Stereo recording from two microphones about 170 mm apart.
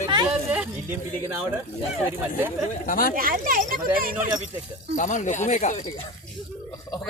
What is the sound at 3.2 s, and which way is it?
Speech, 55° right (ahead or behind).